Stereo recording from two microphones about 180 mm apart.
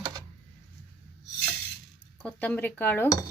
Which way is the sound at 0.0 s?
20° right (ahead or behind).